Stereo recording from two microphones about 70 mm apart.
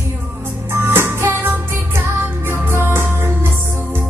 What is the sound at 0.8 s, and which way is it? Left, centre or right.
Music, right.